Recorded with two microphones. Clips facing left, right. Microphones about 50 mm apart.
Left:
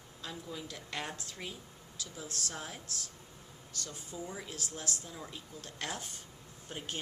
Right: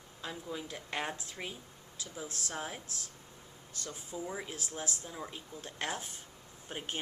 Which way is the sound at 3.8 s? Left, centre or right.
Centre.